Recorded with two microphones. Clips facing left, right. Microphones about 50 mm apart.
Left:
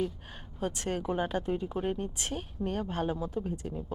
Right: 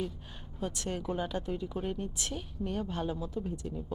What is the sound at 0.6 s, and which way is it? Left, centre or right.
Speech, left.